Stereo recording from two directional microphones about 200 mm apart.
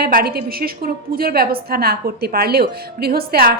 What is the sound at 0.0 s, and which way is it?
A woman's voice, 50° right (ahead or behind).